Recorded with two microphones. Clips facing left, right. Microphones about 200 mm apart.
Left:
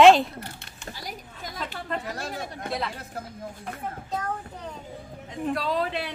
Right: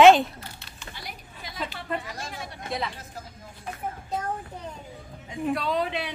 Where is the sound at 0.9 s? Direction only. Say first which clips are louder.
Left 2 dB; 45° left (ahead or behind).